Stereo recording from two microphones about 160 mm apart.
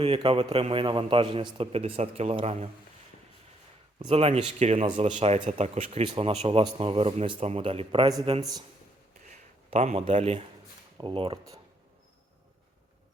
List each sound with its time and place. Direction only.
0.0 s speech: 35° right (ahead or behind)
4.1 s speech: 40° right (ahead or behind)
8.0 s speech: 25° right (ahead or behind)
9.6 s a man's voice: 40° right (ahead or behind)
11.0 s speech: 35° right (ahead or behind)